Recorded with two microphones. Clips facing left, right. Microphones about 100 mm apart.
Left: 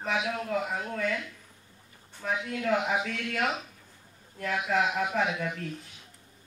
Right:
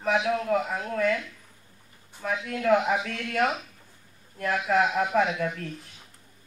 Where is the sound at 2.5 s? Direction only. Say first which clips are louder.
Right 6 dB; 35° right (ahead or behind).